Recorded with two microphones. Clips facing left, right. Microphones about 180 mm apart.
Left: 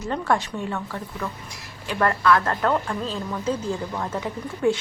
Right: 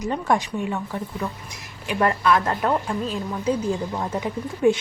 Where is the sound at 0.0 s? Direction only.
15° right (ahead or behind).